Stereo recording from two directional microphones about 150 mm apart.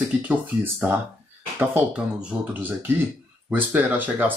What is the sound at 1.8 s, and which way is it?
Speech, 5° right (ahead or behind).